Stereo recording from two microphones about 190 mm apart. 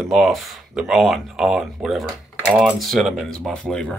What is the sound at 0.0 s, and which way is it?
Speech, centre (ahead or behind).